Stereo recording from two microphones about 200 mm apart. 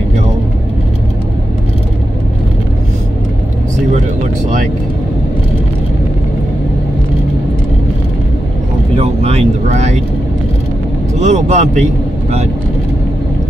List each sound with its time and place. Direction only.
8.9 s vehicle: 30° right (ahead or behind)
11.1 s vehicle: 35° right (ahead or behind)